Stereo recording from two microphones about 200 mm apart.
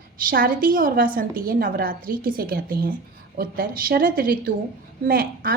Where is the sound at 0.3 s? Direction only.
45° right (ahead or behind).